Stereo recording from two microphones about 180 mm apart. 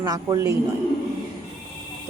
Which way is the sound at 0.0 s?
20° right (ahead or behind).